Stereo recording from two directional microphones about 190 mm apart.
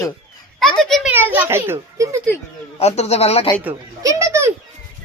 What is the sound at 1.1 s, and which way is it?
A child's voice, 10° right (ahead or behind).